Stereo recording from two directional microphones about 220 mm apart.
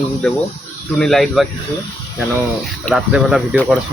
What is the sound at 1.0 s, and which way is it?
Speech, centre (ahead or behind).